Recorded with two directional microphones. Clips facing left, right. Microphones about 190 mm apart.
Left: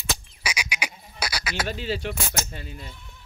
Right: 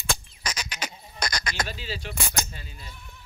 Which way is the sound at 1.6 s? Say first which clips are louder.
Left 7 dB; 55° left (ahead or behind).